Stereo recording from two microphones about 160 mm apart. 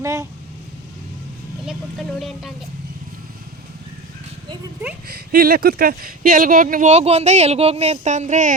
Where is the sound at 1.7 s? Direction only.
Centre (ahead or behind).